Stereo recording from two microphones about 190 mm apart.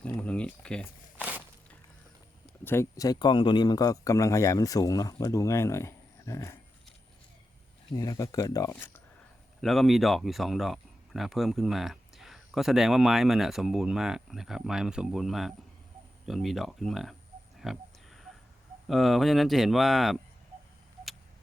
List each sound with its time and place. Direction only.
0.2 s speech: 5° left (ahead or behind)
1.1 s walk: 10° right (ahead or behind)
2.6 s speech: 15° left (ahead or behind)
7.9 s speech: 20° left (ahead or behind)
9.6 s speech: centre (ahead or behind)
17.6 s oink: centre (ahead or behind)
18.9 s speech: centre (ahead or behind)